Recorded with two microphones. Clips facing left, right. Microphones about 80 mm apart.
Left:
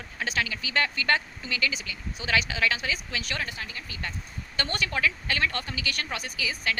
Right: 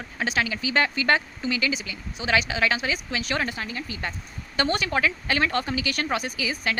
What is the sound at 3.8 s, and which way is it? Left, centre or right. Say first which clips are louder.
Speech: right 4 dB; right.